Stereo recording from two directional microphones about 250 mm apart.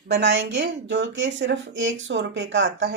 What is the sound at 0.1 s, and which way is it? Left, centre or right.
Speech, right.